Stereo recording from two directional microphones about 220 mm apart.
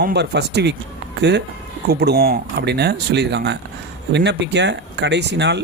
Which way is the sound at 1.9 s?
45° right (ahead or behind).